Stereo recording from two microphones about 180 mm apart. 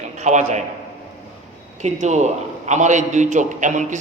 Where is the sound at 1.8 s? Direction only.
40° right (ahead or behind).